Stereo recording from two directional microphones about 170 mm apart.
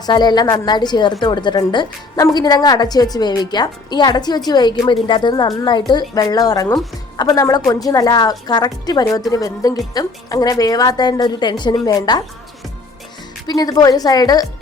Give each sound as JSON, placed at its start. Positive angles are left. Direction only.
{"t": 0.0, "sound": "a woman's voice", "side_deg": 25}
{"t": 13.5, "sound": "a woman's voice", "side_deg": 25}